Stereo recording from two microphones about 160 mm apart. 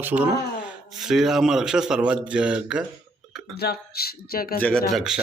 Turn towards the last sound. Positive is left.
turn(degrees=0)  # may be behind; listen again after turning